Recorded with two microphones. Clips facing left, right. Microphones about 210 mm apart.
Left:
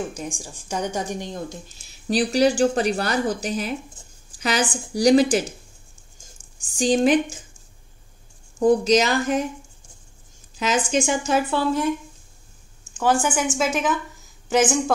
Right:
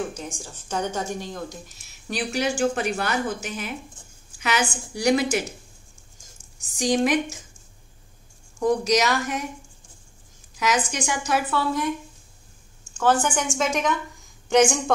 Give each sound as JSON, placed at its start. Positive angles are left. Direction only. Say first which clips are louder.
{"t": 0.1, "sound": "a woman's voice", "louder": "left 3 dB", "side_deg": 15}
{"t": 6.6, "sound": "a woman's voice", "louder": "left 3 dB", "side_deg": 30}
{"t": 8.5, "sound": "a woman's voice", "louder": "left 4 dB", "side_deg": 30}
{"t": 10.5, "sound": "a woman's voice", "louder": "left 3 dB", "side_deg": 25}
{"t": 12.9, "sound": "a woman's voice", "louder": "left 1 dB", "side_deg": 10}